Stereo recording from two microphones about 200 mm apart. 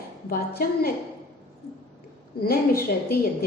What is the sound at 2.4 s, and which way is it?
Speech, 50° left (ahead or behind).